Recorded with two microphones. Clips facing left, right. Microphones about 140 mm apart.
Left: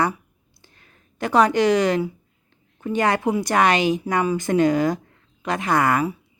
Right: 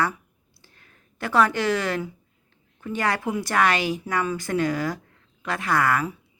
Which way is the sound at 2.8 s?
20° left (ahead or behind).